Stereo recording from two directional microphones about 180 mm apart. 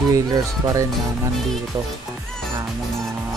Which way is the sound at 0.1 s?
20° right (ahead or behind).